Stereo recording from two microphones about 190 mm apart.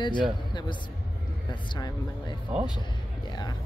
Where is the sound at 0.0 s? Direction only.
25° left (ahead or behind).